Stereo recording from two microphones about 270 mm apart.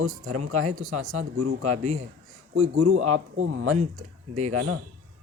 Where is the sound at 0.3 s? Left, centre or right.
Right.